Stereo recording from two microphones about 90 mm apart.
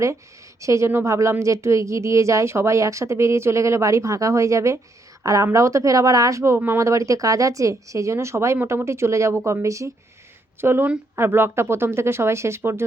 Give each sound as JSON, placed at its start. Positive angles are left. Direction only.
{"t": 0.6, "sound": "speech", "side_deg": -35}